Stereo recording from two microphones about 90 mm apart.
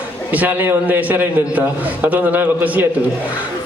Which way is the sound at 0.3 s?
20° right (ahead or behind).